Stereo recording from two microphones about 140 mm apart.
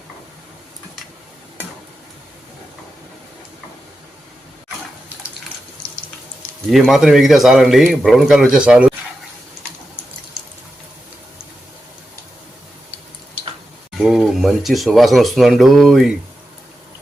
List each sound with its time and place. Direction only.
6.7 s speech: centre (ahead or behind)
13.9 s speech: centre (ahead or behind)